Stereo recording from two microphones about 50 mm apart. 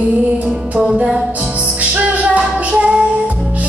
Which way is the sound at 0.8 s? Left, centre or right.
Centre.